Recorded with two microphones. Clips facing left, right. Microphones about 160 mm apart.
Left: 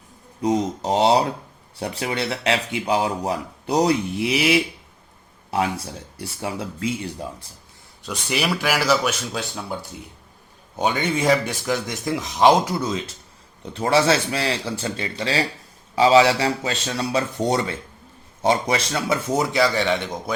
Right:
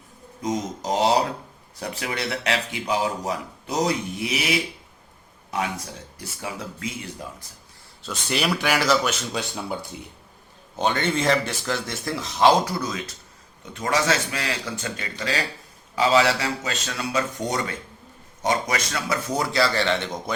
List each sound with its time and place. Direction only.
0.4 s speech: 30° left (ahead or behind)
8.0 s speech: 10° left (ahead or behind)
10.8 s speech: 10° left (ahead or behind)